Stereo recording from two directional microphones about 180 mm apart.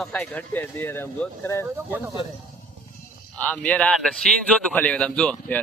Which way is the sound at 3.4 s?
10° left (ahead or behind).